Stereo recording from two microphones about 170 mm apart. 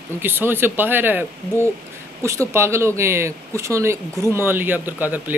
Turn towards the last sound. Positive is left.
turn(degrees=-10)  # may be behind; listen again after turning